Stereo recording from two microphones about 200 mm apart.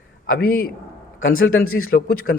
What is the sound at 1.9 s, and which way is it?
Speech, 55° left (ahead or behind).